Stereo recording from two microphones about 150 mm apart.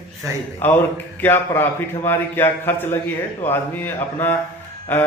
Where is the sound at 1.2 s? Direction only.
15° left (ahead or behind).